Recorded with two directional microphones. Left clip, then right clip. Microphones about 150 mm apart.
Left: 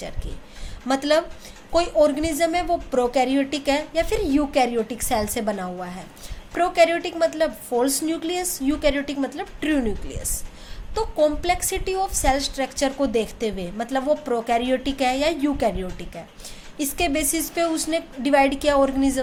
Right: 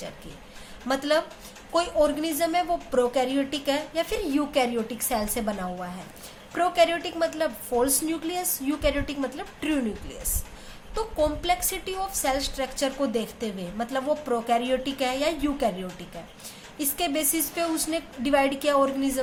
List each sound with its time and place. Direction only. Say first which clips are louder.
0.9 s a woman's voice: left 4 dB; 30° left (ahead or behind)